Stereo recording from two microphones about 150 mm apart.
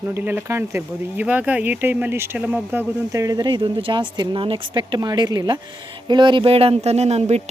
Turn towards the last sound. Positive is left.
turn(degrees=-45)  # may be behind; listen again after turning